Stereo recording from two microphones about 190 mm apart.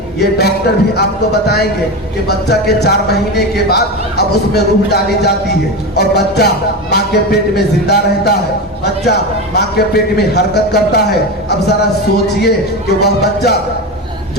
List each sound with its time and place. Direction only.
0.2 s speech: 60° left (ahead or behind)
9.6 s speech: 60° left (ahead or behind)